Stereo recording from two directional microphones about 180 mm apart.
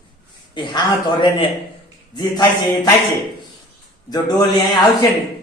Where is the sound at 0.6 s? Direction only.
25° left (ahead or behind).